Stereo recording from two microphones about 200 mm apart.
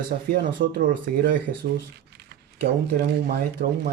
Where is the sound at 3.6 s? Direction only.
45° right (ahead or behind).